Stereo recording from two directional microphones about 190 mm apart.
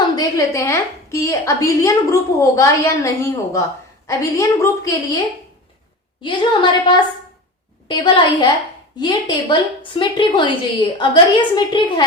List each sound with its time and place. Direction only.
0.2 s a woman's voice: 15° left (ahead or behind)
6.2 s a woman's voice: 25° left (ahead or behind)